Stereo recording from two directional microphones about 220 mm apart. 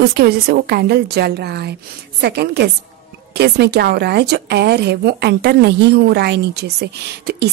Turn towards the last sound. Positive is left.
turn(degrees=-50)  # may be behind; listen again after turning